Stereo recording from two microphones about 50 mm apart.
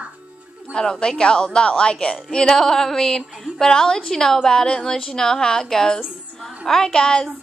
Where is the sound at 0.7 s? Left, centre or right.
Centre.